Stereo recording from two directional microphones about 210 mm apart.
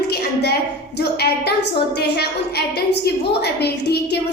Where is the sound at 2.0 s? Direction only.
50° left (ahead or behind).